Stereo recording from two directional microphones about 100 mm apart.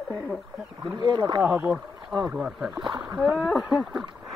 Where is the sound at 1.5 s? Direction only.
20° right (ahead or behind); by 4.0 s 5° right (ahead or behind).